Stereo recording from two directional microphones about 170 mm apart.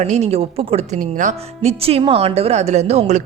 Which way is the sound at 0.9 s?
50° right (ahead or behind).